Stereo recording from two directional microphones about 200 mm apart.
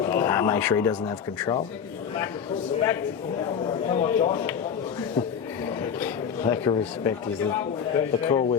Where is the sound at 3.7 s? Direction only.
25° left (ahead or behind).